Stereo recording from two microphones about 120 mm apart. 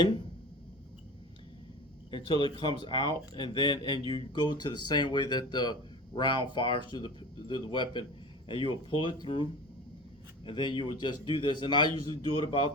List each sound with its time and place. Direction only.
2.0 s a man's voice: 40° left (ahead or behind)